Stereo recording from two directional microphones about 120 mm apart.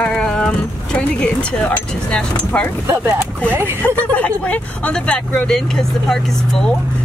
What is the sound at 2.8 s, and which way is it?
Speech, 20° right (ahead or behind).